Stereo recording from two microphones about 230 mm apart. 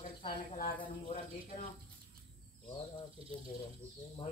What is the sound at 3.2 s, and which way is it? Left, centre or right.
Speech, right.